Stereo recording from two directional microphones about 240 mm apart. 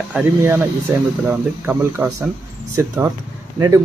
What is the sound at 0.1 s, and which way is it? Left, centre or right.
Speech, centre.